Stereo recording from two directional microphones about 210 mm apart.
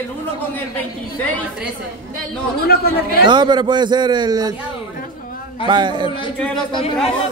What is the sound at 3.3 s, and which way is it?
A man's voice, 20° right (ahead or behind).